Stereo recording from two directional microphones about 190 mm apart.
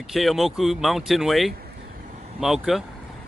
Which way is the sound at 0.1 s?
Centre (ahead or behind).